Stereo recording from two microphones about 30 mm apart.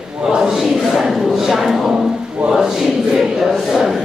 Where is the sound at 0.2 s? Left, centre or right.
Right.